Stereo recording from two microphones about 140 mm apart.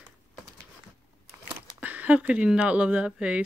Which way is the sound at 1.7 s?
10° right (ahead or behind).